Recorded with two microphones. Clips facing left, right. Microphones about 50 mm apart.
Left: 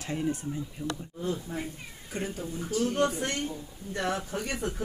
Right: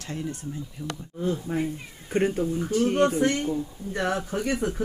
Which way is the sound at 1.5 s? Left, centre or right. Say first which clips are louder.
Right 8 dB; right.